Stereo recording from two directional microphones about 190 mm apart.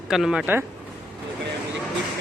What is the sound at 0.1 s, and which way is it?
Speech, 5° right (ahead or behind).